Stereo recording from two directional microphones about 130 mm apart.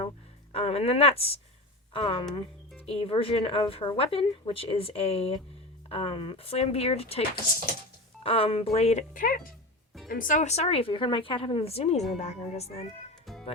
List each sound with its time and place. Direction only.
0.5 s speech: 50° left (ahead or behind)
8.2 s speech: 45° left (ahead or behind)